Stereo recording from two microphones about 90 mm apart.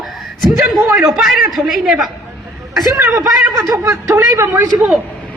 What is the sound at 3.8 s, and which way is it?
Speech, 30° right (ahead or behind).